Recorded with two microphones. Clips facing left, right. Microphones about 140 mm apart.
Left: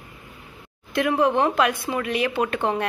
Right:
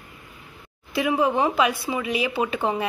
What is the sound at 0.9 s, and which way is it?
Speech, 5° right (ahead or behind).